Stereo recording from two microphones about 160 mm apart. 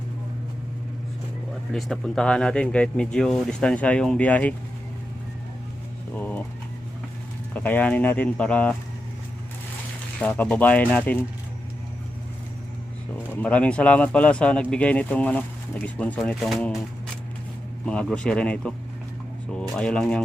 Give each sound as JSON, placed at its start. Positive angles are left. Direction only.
{"t": 1.7, "sound": "speech", "side_deg": 5}
{"t": 6.1, "sound": "a sound", "side_deg": 10}
{"t": 7.5, "sound": "speech", "side_deg": 10}
{"t": 10.2, "sound": "speech", "side_deg": 10}
{"t": 13.3, "sound": "speech", "side_deg": 10}
{"t": 17.8, "sound": "speech", "side_deg": 5}